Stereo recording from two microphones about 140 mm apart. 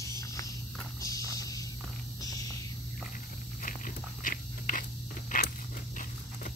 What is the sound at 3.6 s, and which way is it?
Dog, 75° left (ahead or behind).